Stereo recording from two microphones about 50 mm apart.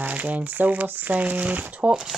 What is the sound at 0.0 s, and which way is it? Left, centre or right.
Speech, right.